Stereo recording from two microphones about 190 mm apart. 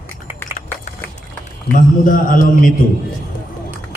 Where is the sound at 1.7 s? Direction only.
45° left (ahead or behind).